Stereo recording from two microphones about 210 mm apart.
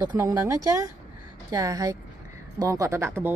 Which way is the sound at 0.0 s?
15° right (ahead or behind).